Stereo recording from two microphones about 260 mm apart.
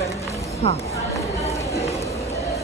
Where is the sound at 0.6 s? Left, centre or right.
Left.